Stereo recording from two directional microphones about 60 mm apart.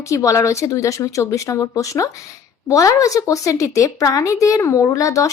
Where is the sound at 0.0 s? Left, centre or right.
Left.